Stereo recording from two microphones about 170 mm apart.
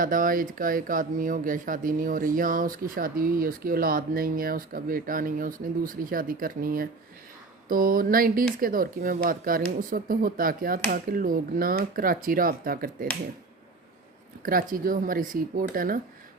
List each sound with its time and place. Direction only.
0.0 s speech: 55° right (ahead or behind)
14.4 s speech: 55° right (ahead or behind)